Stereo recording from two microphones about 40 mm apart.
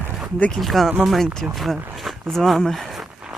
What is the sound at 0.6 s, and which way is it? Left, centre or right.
Speech, centre.